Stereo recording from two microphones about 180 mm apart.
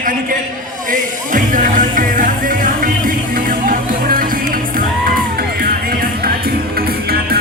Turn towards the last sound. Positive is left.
turn(degrees=-55)  # may be behind; listen again after turning